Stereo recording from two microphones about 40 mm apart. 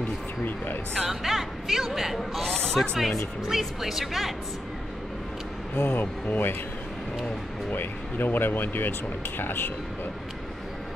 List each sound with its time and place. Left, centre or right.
1.0 s speech: centre
2.1 s a sound: centre
2.5 s music: centre
3.4 s speech: centre
5.8 s speech: left
7.7 s speech: left